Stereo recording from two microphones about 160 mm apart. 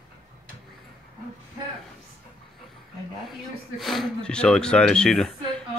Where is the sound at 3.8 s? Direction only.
Centre (ahead or behind).